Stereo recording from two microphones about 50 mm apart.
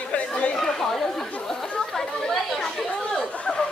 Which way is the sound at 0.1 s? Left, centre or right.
Left.